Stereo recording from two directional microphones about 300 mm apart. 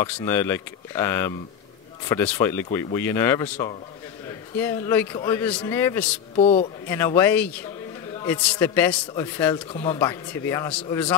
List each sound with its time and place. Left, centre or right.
0.0 s a man's voice: centre
4.6 s a man's voice: centre
6.3 s a man's voice: left
6.9 s a man's voice: centre